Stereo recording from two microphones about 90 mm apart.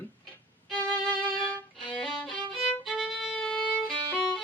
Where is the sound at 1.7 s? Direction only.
10° left (ahead or behind).